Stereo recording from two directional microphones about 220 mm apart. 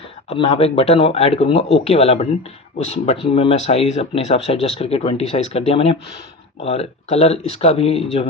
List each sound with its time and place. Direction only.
0.3 s speech: 25° left (ahead or behind)